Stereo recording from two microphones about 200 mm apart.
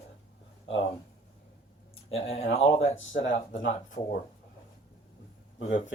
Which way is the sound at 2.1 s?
30° left (ahead or behind).